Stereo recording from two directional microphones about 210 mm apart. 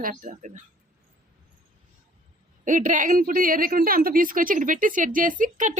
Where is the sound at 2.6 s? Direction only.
40° right (ahead or behind).